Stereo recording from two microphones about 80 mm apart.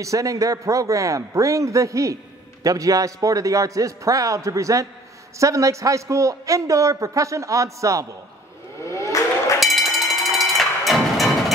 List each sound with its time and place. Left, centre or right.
0.0 s a man's voice: right
9.6 s music: centre